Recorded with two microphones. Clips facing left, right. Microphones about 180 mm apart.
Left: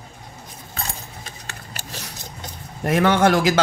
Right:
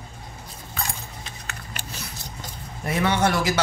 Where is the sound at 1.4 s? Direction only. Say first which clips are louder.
Even; 40° left (ahead or behind).